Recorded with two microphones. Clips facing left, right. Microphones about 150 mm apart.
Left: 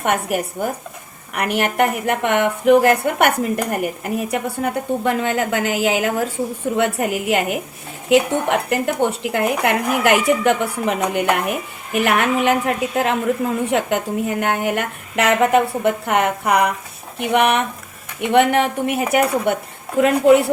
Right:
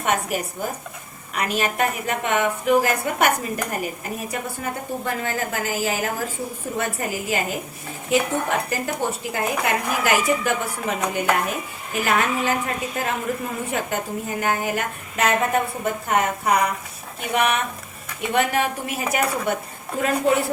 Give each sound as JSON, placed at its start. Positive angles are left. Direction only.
{"t": 0.0, "sound": "a woman's voice", "side_deg": 55}